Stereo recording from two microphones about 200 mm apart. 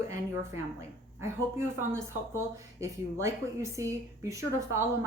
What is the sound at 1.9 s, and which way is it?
A woman's voice, 15° right (ahead or behind).